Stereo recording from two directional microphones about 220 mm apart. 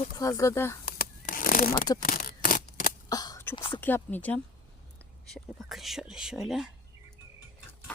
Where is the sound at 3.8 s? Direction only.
10° left (ahead or behind).